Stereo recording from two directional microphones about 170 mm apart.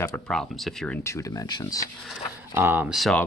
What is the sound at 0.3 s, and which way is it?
Speech, centre (ahead or behind).